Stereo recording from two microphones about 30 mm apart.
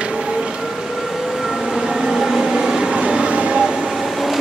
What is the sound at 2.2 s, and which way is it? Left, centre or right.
Vehicle, centre.